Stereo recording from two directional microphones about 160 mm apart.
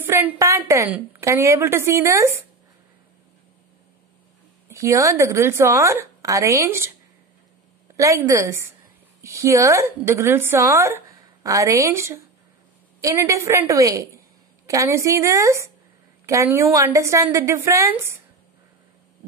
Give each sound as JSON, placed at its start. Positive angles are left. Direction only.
{"t": 0.0, "sound": "speech", "side_deg": -10}
{"t": 4.6, "sound": "speech", "side_deg": -20}
{"t": 7.9, "sound": "a woman's voice", "side_deg": -20}